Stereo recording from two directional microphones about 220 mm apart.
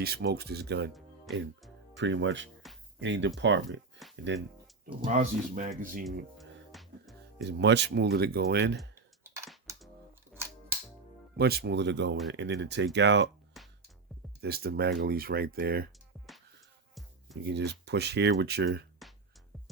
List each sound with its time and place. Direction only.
0.0 s speech: 45° right (ahead or behind)
0.9 s music: centre (ahead or behind)
2.0 s speech: 55° right (ahead or behind)
5.0 s speech: 35° right (ahead or behind)
6.1 s music: centre (ahead or behind)
7.4 s speech: 50° right (ahead or behind)
10.3 s music: centre (ahead or behind)
11.3 s speech: 45° right (ahead or behind)
14.4 s speech: 45° right (ahead or behind)
16.1 s music: centre (ahead or behind)
17.4 s speech: 50° right (ahead or behind)